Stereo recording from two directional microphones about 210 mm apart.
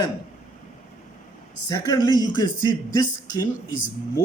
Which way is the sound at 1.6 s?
20° left (ahead or behind).